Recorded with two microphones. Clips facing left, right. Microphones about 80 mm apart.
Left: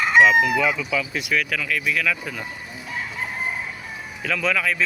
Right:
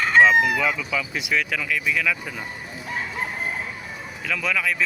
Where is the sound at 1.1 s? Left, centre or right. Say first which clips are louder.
Left 1 dB; centre.